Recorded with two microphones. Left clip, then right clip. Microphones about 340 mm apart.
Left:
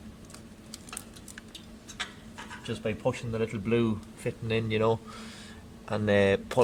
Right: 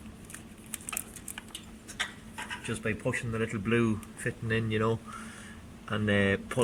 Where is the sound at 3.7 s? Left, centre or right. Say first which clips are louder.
Even; left.